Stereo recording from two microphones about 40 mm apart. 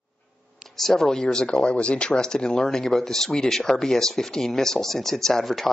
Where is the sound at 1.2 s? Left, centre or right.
Left.